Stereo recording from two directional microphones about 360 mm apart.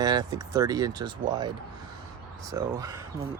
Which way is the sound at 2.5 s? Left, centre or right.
Centre.